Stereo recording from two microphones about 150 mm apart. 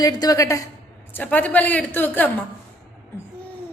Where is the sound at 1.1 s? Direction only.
10° left (ahead or behind).